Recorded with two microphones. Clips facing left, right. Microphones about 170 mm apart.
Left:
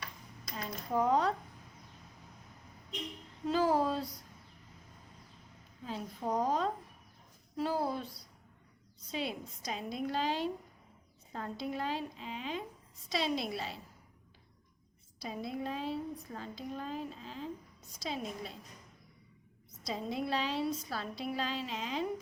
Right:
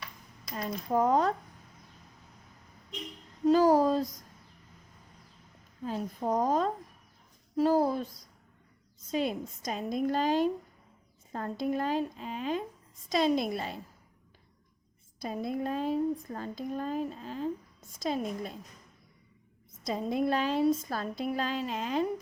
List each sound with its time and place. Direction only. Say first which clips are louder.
0.5 s speech: right 5 dB; 50° right (ahead or behind)
3.4 s speech: right 7 dB; 40° right (ahead or behind)
5.8 s speech: right 5 dB; 45° right (ahead or behind)
15.2 s speech: right 6 dB; 50° right (ahead or behind)
19.8 s speech: right 7 dB; 50° right (ahead or behind)